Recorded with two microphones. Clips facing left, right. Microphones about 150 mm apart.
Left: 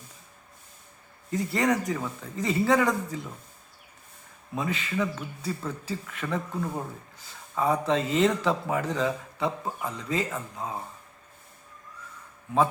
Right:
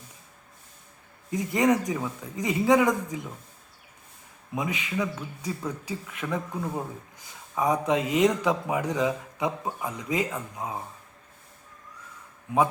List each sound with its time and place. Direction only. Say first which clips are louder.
1.3 s a man's voice: right 2 dB; 15° right (ahead or behind)
4.5 s a man's voice: even; 15° right (ahead or behind)